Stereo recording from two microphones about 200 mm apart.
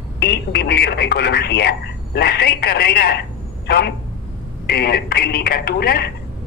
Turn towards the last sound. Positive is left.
turn(degrees=50)  # may be behind; listen again after turning